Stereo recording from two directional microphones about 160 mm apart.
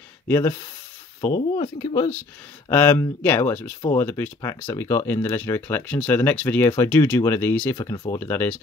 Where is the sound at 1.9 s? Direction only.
20° left (ahead or behind).